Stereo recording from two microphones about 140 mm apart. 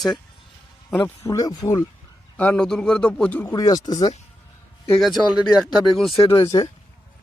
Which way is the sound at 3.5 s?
25° left (ahead or behind).